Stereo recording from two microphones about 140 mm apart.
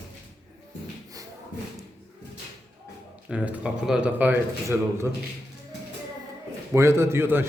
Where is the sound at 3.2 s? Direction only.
10° right (ahead or behind).